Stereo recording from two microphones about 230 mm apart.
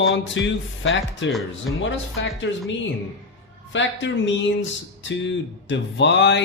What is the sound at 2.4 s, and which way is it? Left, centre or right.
Speech, left.